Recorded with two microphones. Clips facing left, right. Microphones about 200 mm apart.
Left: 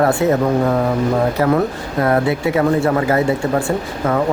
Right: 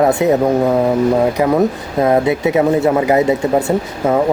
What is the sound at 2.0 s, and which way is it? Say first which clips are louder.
Speech: right 3 dB; 20° right (ahead or behind).